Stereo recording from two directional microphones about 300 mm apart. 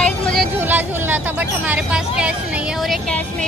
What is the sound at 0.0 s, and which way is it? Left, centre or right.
Vehicle, centre.